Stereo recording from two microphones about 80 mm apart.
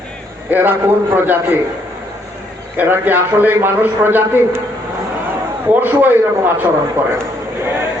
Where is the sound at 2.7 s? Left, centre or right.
Right.